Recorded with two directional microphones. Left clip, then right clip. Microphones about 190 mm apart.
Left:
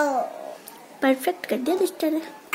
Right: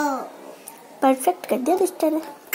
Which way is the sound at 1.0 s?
5° right (ahead or behind).